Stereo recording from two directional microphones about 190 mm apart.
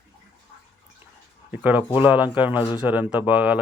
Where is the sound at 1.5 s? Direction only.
10° right (ahead or behind).